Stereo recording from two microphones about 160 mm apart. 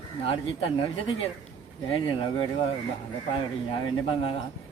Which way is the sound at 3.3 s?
30° left (ahead or behind).